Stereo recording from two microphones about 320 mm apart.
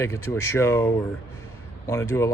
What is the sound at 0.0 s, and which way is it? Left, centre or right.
Speech, centre.